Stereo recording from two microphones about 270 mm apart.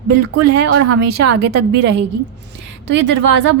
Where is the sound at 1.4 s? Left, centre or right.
Right.